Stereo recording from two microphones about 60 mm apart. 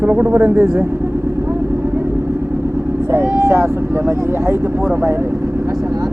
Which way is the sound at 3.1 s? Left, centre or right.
Right.